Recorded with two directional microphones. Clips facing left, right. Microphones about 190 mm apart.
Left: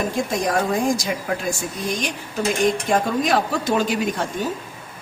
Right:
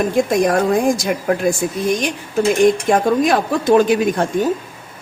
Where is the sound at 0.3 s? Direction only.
55° right (ahead or behind).